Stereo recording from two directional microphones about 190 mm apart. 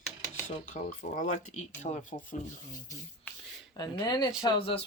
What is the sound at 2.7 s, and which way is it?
Speech, 20° left (ahead or behind).